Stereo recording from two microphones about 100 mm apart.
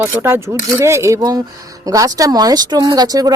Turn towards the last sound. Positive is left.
turn(degrees=-40)  # may be behind; listen again after turning